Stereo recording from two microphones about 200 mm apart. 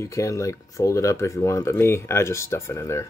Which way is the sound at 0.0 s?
15° left (ahead or behind).